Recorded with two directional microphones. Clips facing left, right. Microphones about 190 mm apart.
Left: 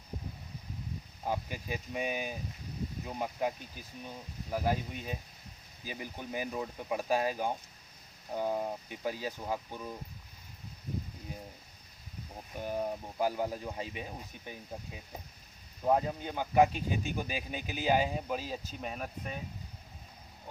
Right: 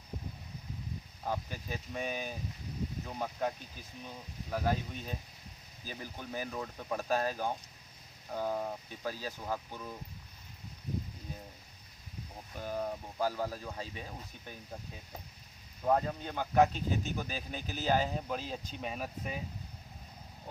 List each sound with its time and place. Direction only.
1.2 s speech: 15° left (ahead or behind)
4.5 s speech: 10° left (ahead or behind)
12.5 s speech: 15° left (ahead or behind); by 19.4 s 5° right (ahead or behind)